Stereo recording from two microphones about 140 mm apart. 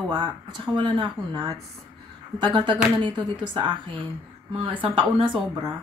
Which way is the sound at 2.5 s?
35° right (ahead or behind).